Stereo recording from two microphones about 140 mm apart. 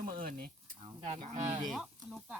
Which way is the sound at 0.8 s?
40° right (ahead or behind).